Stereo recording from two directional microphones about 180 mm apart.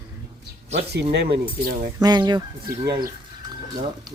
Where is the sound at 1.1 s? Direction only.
65° right (ahead or behind).